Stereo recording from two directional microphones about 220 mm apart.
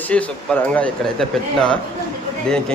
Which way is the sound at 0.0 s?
5° left (ahead or behind).